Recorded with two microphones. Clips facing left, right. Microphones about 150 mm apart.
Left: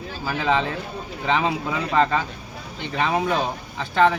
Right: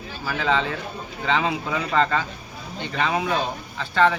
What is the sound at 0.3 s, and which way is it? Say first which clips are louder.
Speech: left 1 dB; 10° left (ahead or behind).